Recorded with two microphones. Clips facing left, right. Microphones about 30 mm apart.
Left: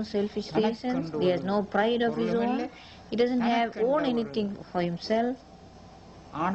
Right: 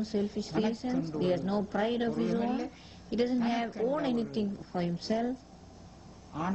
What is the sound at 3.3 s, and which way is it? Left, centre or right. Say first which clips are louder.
A woman's voice: left 5 dB; left.